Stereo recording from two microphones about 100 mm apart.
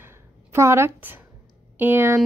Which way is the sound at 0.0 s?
25° right (ahead or behind).